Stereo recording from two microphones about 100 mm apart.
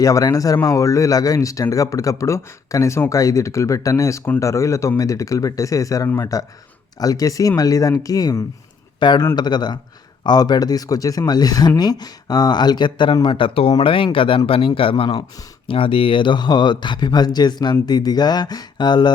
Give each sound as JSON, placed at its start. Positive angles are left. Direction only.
{"t": 0.0, "sound": "speech", "side_deg": 35}
{"t": 9.0, "sound": "speech", "side_deg": 50}